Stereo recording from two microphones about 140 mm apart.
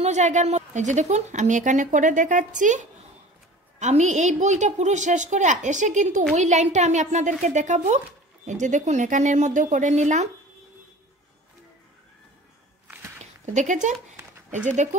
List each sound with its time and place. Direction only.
0.0 s a woman's voice: 55° right (ahead or behind)
3.8 s a woman's voice: 55° right (ahead or behind)
12.8 s a sound: 10° right (ahead or behind)
13.2 s a woman's voice: 55° right (ahead or behind)